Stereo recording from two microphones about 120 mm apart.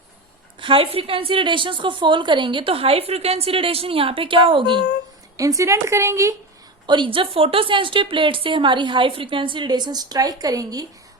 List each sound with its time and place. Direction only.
0.6 s a woman's voice: 50° right (ahead or behind)
5.4 s speech: 25° right (ahead or behind)
6.8 s a woman's voice: 40° right (ahead or behind)